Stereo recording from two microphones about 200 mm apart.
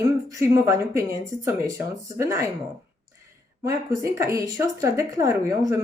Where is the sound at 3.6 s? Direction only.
15° right (ahead or behind).